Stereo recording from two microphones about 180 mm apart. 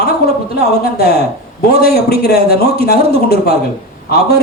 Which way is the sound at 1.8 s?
60° left (ahead or behind).